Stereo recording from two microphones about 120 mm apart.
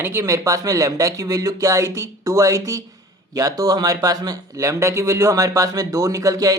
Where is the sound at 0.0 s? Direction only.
20° right (ahead or behind).